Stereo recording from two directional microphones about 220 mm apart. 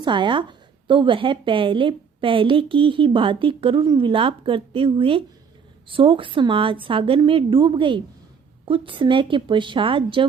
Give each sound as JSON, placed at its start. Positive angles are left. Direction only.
{"t": 0.0, "sound": "a woman's voice", "side_deg": -20}